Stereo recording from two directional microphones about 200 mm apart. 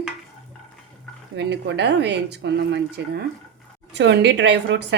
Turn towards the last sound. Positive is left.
turn(degrees=-60)  # may be behind; listen again after turning